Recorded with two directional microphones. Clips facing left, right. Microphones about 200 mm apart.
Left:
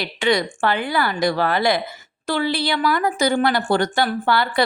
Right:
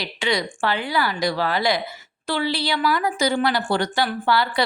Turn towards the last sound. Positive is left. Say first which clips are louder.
# left 2 dB
turn(degrees=50)  # may be behind; listen again after turning